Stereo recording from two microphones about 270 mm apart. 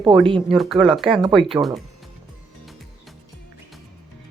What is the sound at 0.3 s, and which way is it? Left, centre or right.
Speech, centre.